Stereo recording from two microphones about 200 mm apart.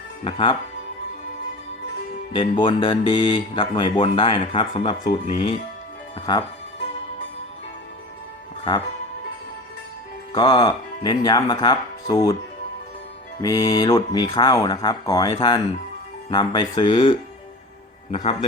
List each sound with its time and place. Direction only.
0.3 s speech: 25° left (ahead or behind)
2.3 s speech: 25° left (ahead or behind)
6.1 s speech: 20° left (ahead or behind)
10.3 s speech: 20° left (ahead or behind)
13.4 s speech: 15° left (ahead or behind)